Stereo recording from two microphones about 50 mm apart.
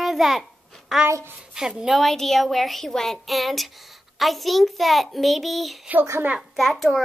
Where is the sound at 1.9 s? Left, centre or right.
Centre.